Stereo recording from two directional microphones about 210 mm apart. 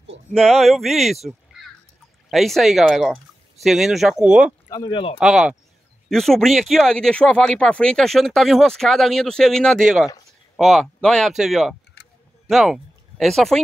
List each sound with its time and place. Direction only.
0.3 s speech: centre (ahead or behind)
4.6 s speech: 20° left (ahead or behind)
5.2 s speech: centre (ahead or behind)